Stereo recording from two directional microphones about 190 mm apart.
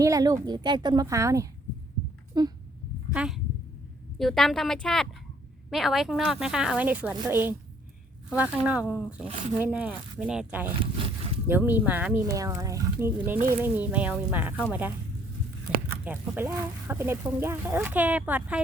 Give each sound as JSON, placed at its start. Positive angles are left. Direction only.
{"t": 0.0, "sound": "a woman's voice", "side_deg": -15}
{"t": 3.1, "sound": "speech", "side_deg": -5}
{"t": 16.0, "sound": "speech", "side_deg": -10}